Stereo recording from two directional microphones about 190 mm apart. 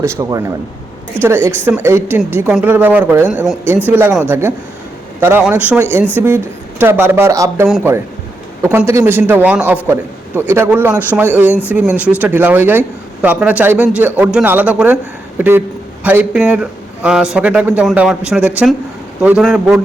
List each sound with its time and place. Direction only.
0.0 s a man's voice: 15° right (ahead or behind)
1.5 s a man's voice: 10° right (ahead or behind)